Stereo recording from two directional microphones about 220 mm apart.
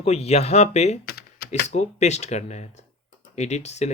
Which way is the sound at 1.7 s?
30° left (ahead or behind).